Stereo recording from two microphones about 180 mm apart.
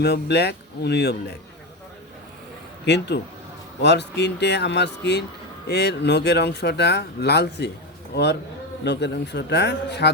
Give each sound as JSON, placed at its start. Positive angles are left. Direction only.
{"t": 0.0, "sound": "speech", "side_deg": 65}
{"t": 2.8, "sound": "speech", "side_deg": 70}